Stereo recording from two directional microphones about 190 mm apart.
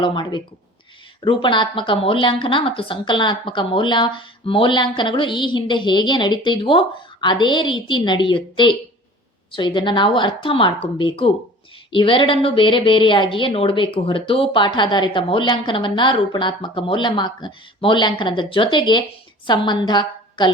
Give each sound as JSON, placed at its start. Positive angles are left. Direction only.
{"t": 0.0, "sound": "speech", "side_deg": 25}